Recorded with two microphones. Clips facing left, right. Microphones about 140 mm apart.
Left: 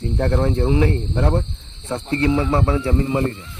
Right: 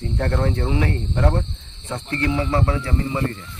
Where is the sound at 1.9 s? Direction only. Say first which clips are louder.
Left 4 dB; 25° left (ahead or behind).